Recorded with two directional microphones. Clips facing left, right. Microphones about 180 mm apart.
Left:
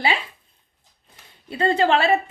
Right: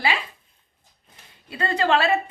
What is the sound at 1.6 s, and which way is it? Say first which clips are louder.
Speech: left 3 dB; 30° left (ahead or behind).